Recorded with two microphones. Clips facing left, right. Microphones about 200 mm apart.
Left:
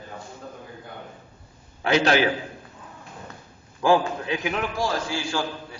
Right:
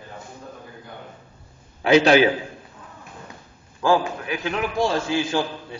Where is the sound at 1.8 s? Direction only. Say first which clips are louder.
Right 5 dB; 15° right (ahead or behind).